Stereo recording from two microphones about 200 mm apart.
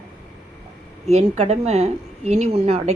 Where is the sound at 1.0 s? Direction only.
35° right (ahead or behind).